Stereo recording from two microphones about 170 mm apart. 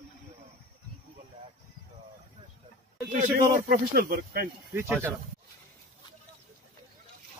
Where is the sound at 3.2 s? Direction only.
60° right (ahead or behind).